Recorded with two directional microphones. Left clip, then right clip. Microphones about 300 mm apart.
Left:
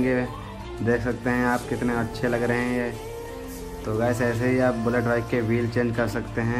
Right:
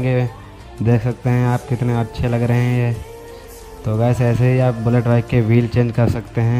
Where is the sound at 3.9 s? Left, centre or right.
Right.